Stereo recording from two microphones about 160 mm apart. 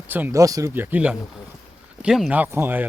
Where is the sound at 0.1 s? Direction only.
15° right (ahead or behind).